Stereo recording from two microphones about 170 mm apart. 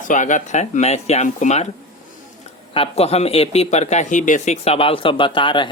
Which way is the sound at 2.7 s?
35° left (ahead or behind).